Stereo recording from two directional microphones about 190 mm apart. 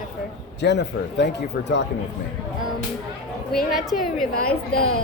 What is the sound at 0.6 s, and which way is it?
Speech, 65° left (ahead or behind).